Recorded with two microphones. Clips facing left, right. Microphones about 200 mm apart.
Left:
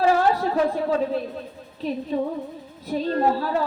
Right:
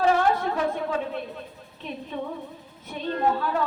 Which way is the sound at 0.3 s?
35° left (ahead or behind).